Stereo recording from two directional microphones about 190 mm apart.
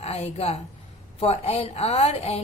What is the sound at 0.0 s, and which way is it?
A woman's voice, 30° left (ahead or behind).